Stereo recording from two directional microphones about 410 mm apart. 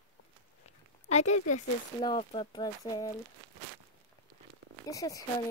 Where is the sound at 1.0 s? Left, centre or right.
Centre.